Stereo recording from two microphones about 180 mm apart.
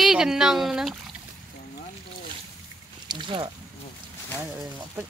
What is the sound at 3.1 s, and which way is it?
Boat, 25° right (ahead or behind).